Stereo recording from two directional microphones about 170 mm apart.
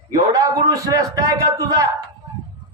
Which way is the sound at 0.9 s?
20° right (ahead or behind).